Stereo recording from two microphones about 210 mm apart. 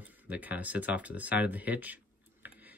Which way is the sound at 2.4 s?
10° right (ahead or behind).